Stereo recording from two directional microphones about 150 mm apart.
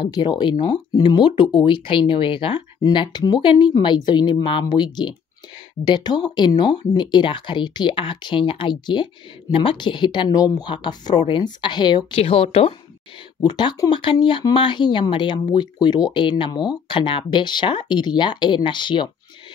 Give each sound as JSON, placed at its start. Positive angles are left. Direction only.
{"t": 0.0, "sound": "speech", "side_deg": 30}
{"t": 12.2, "sound": "speech", "side_deg": 40}